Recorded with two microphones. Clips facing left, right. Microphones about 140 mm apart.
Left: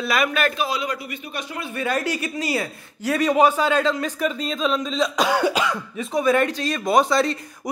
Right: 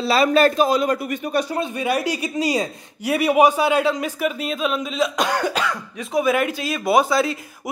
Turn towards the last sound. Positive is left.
turn(degrees=-5)  # may be behind; listen again after turning